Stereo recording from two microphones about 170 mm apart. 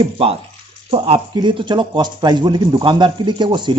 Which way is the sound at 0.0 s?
35° right (ahead or behind).